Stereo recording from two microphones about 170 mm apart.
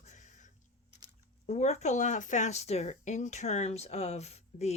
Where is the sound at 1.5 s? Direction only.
40° left (ahead or behind).